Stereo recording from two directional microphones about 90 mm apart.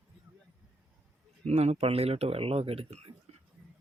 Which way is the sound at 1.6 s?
90° right.